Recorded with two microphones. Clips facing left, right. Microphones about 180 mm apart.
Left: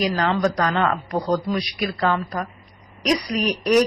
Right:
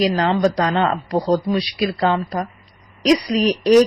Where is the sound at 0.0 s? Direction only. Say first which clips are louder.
Right 4 dB; 30° right (ahead or behind).